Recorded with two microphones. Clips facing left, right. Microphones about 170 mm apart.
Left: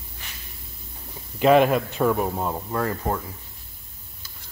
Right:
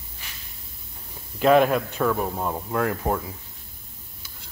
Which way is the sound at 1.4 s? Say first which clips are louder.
Left 1 dB; 5° left (ahead or behind).